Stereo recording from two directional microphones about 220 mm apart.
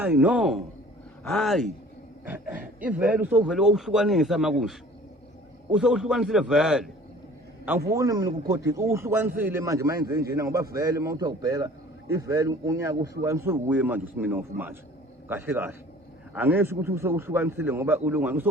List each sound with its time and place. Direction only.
0.0 s a man's voice: 10° right (ahead or behind)
5.7 s a man's voice: 5° right (ahead or behind)